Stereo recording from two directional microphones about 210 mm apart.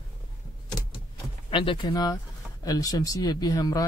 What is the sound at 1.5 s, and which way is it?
Speech, 25° left (ahead or behind).